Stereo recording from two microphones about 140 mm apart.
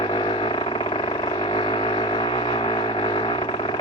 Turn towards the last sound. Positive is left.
turn(degrees=35)  # may be behind; listen again after turning